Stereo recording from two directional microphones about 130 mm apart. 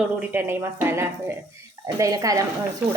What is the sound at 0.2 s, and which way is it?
A woman's voice, 15° right (ahead or behind).